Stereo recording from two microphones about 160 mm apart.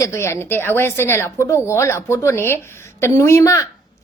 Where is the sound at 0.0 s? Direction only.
15° left (ahead or behind).